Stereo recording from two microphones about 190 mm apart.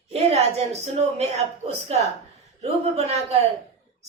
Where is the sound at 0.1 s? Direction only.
35° right (ahead or behind).